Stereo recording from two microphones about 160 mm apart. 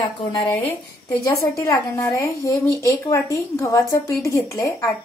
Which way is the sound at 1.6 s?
20° left (ahead or behind).